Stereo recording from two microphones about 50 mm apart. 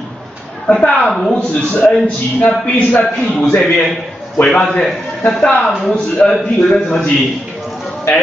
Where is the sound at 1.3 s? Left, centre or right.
Centre.